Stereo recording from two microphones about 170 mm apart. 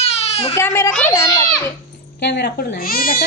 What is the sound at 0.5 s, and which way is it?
Speech, 15° left (ahead or behind).